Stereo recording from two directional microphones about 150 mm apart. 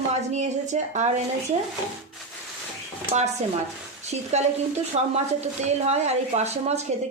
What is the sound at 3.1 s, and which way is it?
Speech, 45° right (ahead or behind).